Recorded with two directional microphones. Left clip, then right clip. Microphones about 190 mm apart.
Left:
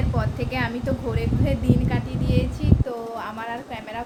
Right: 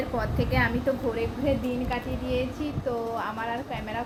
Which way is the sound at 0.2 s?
10° left (ahead or behind).